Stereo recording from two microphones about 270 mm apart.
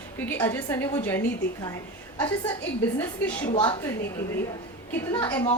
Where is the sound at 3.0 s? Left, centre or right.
Centre.